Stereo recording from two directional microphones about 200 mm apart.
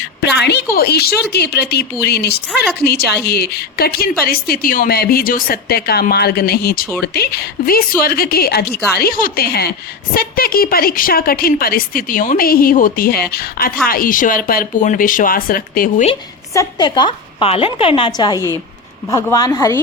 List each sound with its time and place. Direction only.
0.0 s a woman's voice: 55° left (ahead or behind)
16.6 s a woman's voice: 20° left (ahead or behind)
18.3 s a woman's voice: 15° right (ahead or behind)
19.0 s a woman's voice: 15° left (ahead or behind)